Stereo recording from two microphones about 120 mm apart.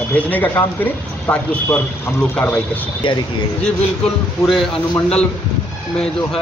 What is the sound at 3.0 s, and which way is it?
Speech, 45° left (ahead or behind).